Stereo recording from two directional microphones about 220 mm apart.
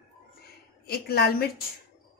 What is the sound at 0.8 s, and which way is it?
Speech, 45° left (ahead or behind).